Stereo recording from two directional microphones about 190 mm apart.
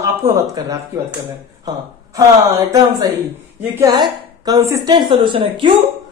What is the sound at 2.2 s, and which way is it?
A woman's voice, 20° right (ahead or behind).